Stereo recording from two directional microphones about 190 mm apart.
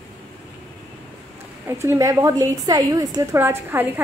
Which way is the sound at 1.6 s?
15° right (ahead or behind).